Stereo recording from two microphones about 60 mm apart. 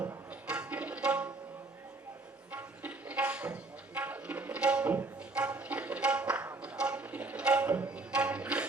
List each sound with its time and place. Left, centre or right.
0.4 s tabla: centre
2.5 s music: right
6.6 s tabla: centre